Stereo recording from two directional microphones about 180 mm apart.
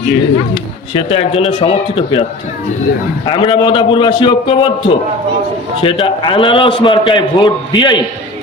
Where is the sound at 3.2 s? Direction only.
30° left (ahead or behind).